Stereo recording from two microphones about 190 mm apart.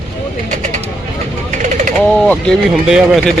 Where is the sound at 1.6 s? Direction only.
40° right (ahead or behind).